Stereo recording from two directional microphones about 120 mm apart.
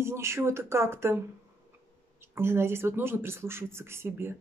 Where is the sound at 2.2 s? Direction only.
20° right (ahead or behind).